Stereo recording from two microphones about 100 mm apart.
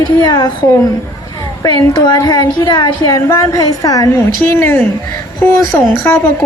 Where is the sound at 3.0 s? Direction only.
30° left (ahead or behind).